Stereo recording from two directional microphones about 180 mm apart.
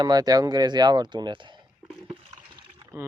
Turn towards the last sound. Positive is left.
turn(degrees=-15)  # may be behind; listen again after turning